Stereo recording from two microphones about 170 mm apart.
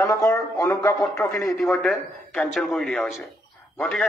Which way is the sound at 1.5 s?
Centre (ahead or behind).